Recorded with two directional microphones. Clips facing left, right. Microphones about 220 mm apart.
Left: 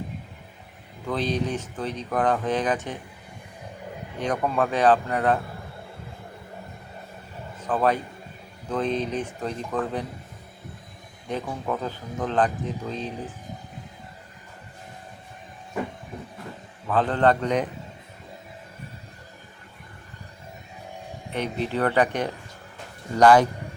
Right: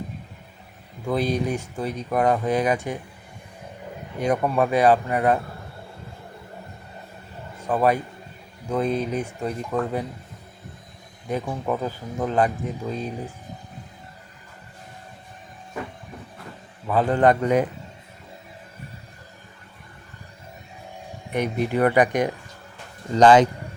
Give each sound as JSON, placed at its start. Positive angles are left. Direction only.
{"t": 1.0, "sound": "speech", "side_deg": -10}
{"t": 4.2, "sound": "speech", "side_deg": -10}
{"t": 7.6, "sound": "a man's voice", "side_deg": -10}
{"t": 11.3, "sound": "speech", "side_deg": -10}
{"t": 16.8, "sound": "speech", "side_deg": -10}
{"t": 21.3, "sound": "a man's voice", "side_deg": -10}